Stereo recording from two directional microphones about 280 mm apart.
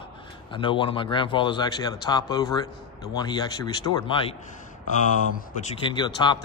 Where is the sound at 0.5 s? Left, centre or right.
Centre.